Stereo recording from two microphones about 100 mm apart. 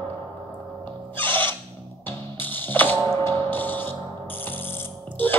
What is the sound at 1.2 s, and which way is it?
Owl, 20° left (ahead or behind).